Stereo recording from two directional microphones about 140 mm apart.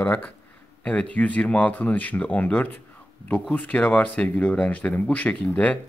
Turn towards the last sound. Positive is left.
turn(degrees=10)  # may be behind; listen again after turning